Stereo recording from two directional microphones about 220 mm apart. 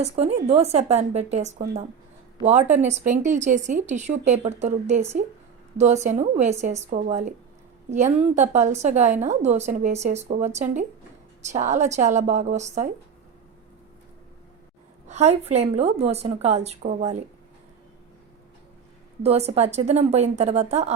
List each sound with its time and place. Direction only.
0.0 s a woman's voice: 30° right (ahead or behind)
15.0 s a woman's voice: 30° right (ahead or behind)
19.2 s a woman's voice: 30° right (ahead or behind)